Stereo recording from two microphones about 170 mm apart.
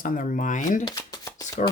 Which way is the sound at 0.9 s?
20° left (ahead or behind).